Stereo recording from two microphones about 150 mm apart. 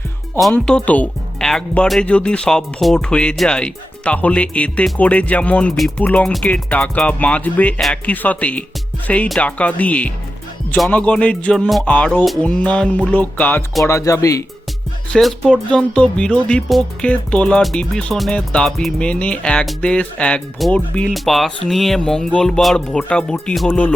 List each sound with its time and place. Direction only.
0.5 s speech: 5° left (ahead or behind); by 14.4 s 20° left (ahead or behind)
15.1 s speech: 5° left (ahead or behind)